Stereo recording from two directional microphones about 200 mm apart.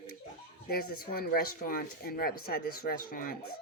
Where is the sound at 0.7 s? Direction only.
50° left (ahead or behind).